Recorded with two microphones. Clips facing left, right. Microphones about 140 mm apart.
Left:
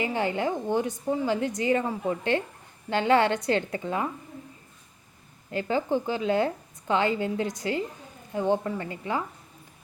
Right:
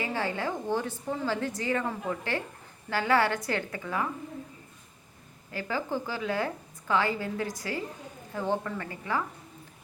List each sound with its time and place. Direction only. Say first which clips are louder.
0.0 s a woman's voice: left 4 dB; 20° left (ahead or behind)
5.5 s a woman's voice: left 6 dB; 25° left (ahead or behind)